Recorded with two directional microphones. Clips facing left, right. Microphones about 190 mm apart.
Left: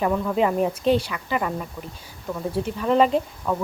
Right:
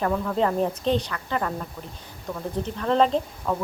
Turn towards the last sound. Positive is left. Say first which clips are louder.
# left 2 dB
turn(degrees=0)  # may be behind; listen again after turning